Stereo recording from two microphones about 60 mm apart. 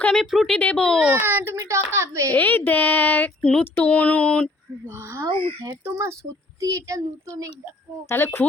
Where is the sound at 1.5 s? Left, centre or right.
Right.